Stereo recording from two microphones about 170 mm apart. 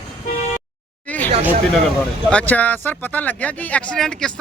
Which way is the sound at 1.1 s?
10° left (ahead or behind).